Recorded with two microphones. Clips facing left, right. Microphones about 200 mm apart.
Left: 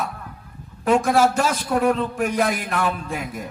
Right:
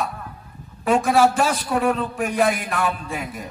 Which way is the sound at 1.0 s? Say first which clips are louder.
Right 3 dB; 45° left (ahead or behind).